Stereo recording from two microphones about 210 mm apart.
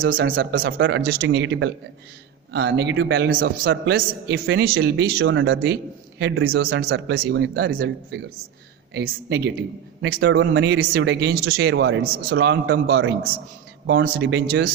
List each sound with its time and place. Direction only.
0.0 s speech: 45° right (ahead or behind)
0.8 s speech: 60° right (ahead or behind)
8.9 s speech: 50° right (ahead or behind)